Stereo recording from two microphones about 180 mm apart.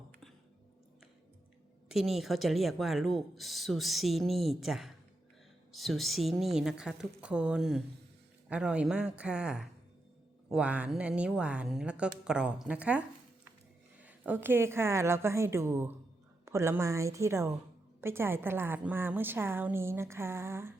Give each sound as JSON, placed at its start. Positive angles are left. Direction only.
{"t": 1.9, "sound": "a woman's voice", "side_deg": 0}